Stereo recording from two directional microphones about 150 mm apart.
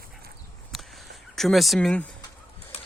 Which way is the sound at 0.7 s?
Centre (ahead or behind).